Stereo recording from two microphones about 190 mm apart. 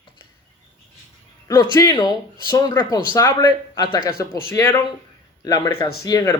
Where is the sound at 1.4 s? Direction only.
20° left (ahead or behind).